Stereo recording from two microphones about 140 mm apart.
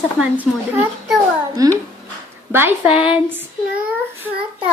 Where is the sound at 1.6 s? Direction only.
25° right (ahead or behind); by 3.4 s 5° right (ahead or behind).